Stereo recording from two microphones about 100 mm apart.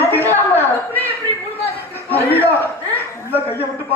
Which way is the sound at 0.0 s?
20° left (ahead or behind).